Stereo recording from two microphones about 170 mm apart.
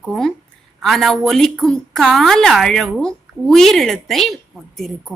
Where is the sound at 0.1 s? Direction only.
Centre (ahead or behind).